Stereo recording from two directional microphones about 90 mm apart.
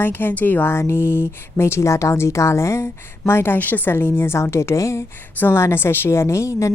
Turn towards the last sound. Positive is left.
turn(degrees=35)  # may be behind; listen again after turning